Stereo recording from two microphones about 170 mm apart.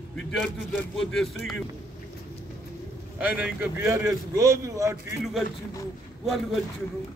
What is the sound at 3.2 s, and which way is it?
A man's voice, 10° right (ahead or behind).